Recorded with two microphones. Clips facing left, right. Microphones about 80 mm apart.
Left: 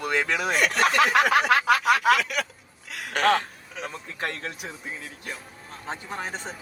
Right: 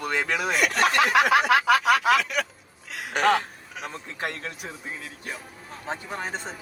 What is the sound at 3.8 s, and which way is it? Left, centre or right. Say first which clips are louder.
Speech: even; centre.